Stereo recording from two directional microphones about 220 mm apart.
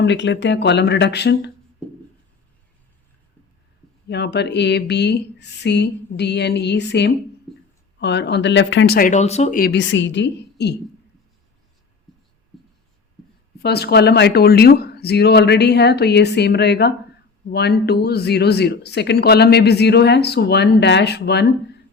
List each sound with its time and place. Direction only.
0.0 s speech: 55° left (ahead or behind)
1.8 s a sound: 5° left (ahead or behind)
4.1 s speech: 50° left (ahead or behind)
12.1 s writing: centre (ahead or behind)
13.6 s speech: 50° left (ahead or behind)